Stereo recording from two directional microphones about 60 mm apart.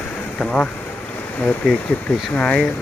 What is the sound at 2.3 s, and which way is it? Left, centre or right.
Speech, left.